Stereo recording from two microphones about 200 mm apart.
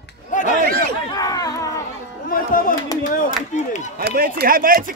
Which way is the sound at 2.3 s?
45° left (ahead or behind).